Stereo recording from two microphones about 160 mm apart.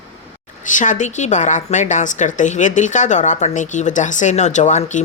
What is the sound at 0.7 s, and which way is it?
Speech, 55° left (ahead or behind).